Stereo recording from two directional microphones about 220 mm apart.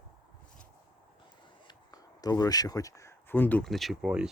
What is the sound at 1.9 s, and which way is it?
Speech, 15° left (ahead or behind).